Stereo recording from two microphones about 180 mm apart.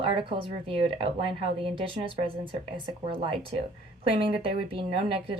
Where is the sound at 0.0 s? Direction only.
30° right (ahead or behind).